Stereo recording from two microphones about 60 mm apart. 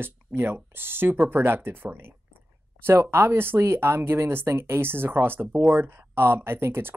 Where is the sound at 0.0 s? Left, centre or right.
Right.